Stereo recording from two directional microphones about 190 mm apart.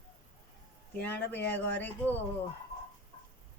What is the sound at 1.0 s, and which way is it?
Speech, 10° left (ahead or behind).